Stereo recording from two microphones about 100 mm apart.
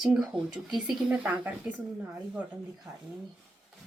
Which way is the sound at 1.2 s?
15° right (ahead or behind).